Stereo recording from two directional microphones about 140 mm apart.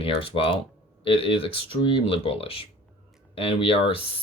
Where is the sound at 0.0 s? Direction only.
40° left (ahead or behind).